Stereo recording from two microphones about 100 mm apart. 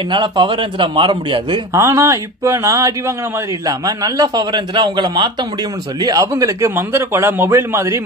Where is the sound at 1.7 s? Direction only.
25° right (ahead or behind); by 5.3 s 50° right (ahead or behind).